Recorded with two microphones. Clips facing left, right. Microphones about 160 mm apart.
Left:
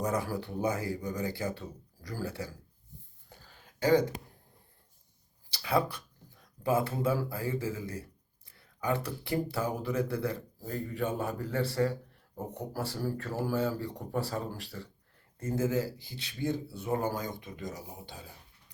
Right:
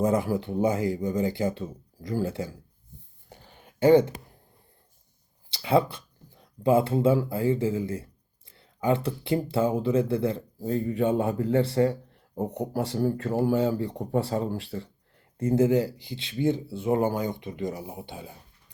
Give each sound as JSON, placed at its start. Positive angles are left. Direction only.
{"t": 0.0, "sound": "speech", "side_deg": -25}
{"t": 3.2, "sound": "a sound", "side_deg": -20}
{"t": 5.5, "sound": "speech", "side_deg": -25}